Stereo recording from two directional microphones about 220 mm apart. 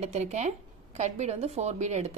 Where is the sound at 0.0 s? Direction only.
30° right (ahead or behind).